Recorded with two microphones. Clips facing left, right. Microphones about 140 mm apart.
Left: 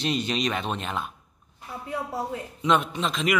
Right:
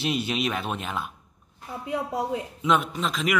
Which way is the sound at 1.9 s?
15° right (ahead or behind).